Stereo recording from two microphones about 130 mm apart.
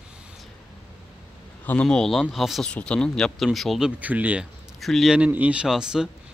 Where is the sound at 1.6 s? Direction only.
10° left (ahead or behind); by 4.5 s 10° right (ahead or behind).